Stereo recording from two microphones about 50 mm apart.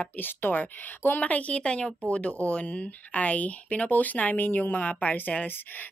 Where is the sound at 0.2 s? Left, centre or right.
Left.